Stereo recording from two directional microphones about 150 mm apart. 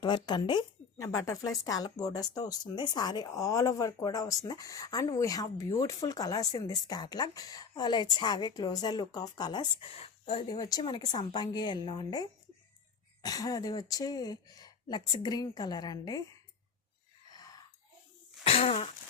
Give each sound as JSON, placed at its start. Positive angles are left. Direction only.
{"t": 0.0, "sound": "speech", "side_deg": 30}
{"t": 18.4, "sound": "throat clearing", "side_deg": 40}